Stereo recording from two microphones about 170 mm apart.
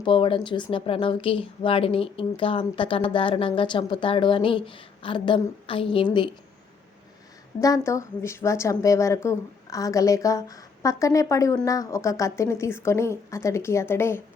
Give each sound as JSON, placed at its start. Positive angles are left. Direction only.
{"t": 0.0, "sound": "speech", "side_deg": 30}
{"t": 7.6, "sound": "a woman's voice", "side_deg": 20}